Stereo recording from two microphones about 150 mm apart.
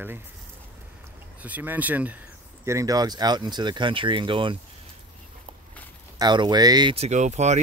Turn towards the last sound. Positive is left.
turn(degrees=-50)  # may be behind; listen again after turning